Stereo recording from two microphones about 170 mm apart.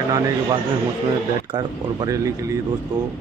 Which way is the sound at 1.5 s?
30° right (ahead or behind).